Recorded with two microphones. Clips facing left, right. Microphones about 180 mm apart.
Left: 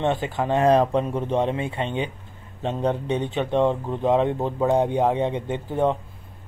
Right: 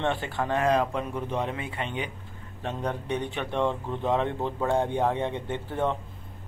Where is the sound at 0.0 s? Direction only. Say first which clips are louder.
Left 5 dB; 15° left (ahead or behind).